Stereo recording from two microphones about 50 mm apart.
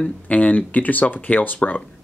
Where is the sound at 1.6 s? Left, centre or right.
Left.